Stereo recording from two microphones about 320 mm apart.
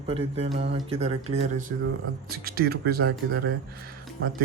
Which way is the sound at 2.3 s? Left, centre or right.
Right.